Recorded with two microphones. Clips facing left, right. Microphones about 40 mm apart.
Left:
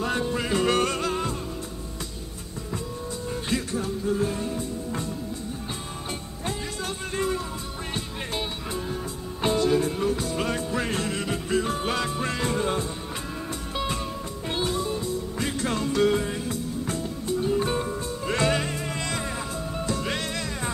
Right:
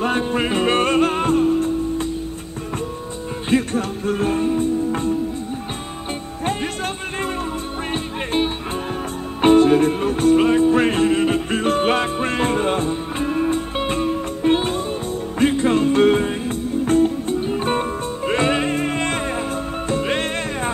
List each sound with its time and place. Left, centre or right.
0.0 s music: right
3.7 s music: right
7.9 s music: right
10.4 s music: right